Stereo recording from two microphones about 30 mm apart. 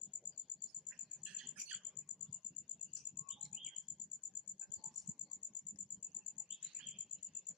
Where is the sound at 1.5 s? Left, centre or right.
Right.